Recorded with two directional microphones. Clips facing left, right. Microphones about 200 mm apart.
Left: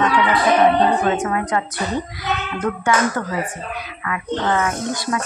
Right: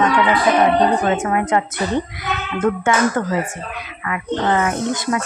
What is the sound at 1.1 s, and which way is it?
A woman's voice, 25° right (ahead or behind).